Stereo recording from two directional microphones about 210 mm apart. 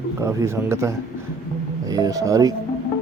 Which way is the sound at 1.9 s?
15° right (ahead or behind).